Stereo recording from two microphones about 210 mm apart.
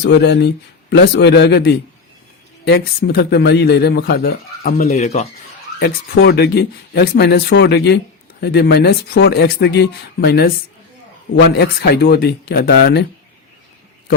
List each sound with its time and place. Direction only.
0.1 s speech: 55° left (ahead or behind)
4.8 s speech: 30° left (ahead or behind)
5.8 s speech: 50° left (ahead or behind)
11.5 s speech: 50° left (ahead or behind)